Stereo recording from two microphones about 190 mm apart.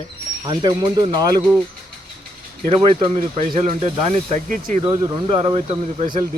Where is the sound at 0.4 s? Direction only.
25° right (ahead or behind).